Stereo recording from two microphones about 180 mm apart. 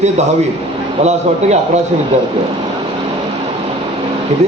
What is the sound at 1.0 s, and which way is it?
Speech, 40° right (ahead or behind).